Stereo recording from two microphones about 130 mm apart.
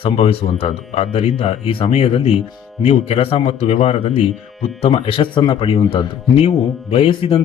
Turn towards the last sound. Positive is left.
turn(degrees=45)  # may be behind; listen again after turning